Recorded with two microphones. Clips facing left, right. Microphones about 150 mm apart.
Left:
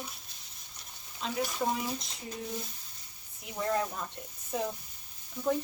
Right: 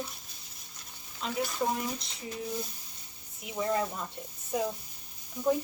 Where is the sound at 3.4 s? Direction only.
Centre (ahead or behind).